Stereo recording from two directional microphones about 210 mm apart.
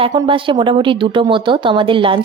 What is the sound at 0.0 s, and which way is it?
Speech, 25° right (ahead or behind).